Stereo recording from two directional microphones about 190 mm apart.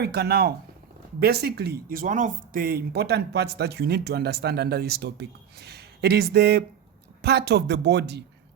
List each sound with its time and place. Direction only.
0.0 s speech: 55° right (ahead or behind)